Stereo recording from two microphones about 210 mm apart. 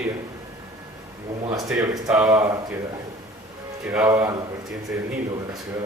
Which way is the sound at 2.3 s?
15° right (ahead or behind).